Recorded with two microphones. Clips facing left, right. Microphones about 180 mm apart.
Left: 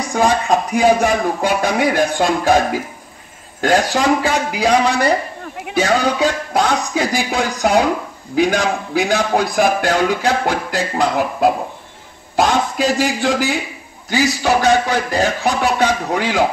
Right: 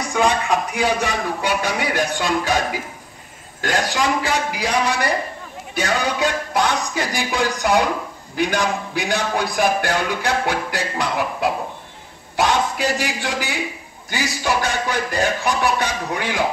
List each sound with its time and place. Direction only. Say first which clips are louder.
0.1 s speech: left 4 dB; 40° left (ahead or behind)
1.5 s speech: left 5 dB; 50° left (ahead or behind)
3.6 s a man's voice: left 6 dB; 60° left (ahead or behind)